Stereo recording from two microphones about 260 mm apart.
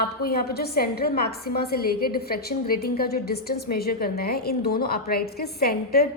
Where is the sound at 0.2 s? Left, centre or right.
Left.